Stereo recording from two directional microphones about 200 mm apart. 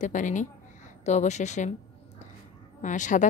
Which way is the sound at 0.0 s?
40° left (ahead or behind).